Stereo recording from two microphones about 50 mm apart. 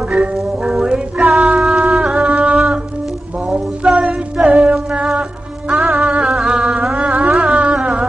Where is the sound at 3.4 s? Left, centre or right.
Centre.